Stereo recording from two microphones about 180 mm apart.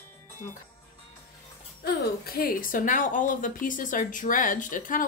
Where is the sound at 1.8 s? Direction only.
60° left (ahead or behind).